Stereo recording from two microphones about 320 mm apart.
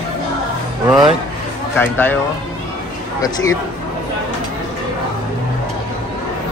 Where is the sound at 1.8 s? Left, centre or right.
Centre.